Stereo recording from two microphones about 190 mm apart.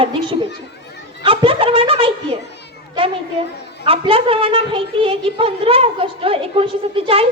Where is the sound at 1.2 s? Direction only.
30° right (ahead or behind).